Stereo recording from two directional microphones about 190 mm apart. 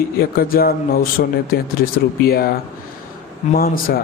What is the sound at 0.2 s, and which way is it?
Speech, 50° left (ahead or behind).